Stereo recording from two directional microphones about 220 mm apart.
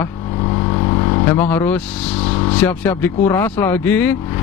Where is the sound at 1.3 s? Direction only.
10° left (ahead or behind).